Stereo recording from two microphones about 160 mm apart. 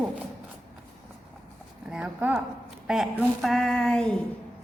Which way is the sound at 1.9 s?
10° right (ahead or behind).